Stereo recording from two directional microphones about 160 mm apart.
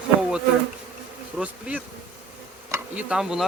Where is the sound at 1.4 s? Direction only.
5° right (ahead or behind).